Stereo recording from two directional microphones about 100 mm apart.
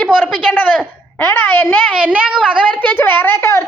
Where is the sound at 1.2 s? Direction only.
20° left (ahead or behind).